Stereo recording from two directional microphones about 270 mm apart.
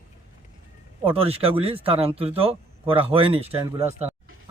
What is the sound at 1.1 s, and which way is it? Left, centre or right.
Speech, right.